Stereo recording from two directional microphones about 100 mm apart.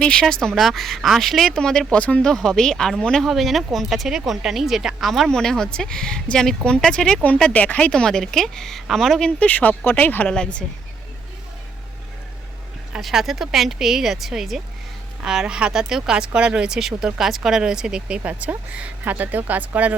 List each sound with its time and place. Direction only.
0.0 s speech: 5° left (ahead or behind)
12.9 s speech: centre (ahead or behind)